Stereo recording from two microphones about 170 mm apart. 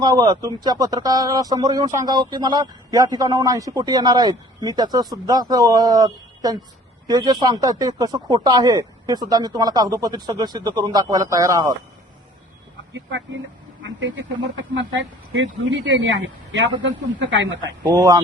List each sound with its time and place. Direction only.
0.0 s speech: 25° right (ahead or behind)
12.9 s speech: 90° right
14.5 s speech: 90° right
17.6 s speech: 25° right (ahead or behind)